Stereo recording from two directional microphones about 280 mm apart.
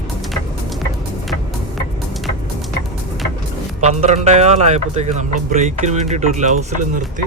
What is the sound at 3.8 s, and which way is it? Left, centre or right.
Speech, right.